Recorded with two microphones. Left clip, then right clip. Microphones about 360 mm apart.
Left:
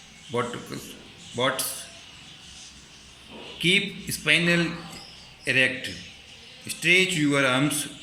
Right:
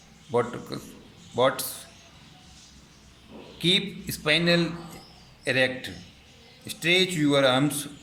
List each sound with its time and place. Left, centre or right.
0.3 s a man's voice: right
3.6 s a man's voice: right